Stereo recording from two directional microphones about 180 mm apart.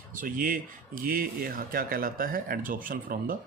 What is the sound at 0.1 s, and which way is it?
Speech, 50° right (ahead or behind).